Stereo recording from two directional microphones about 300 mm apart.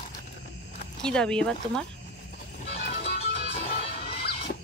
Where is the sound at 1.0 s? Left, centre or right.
Centre.